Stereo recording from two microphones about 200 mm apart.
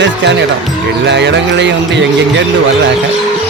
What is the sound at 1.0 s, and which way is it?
Speech, 60° right (ahead or behind).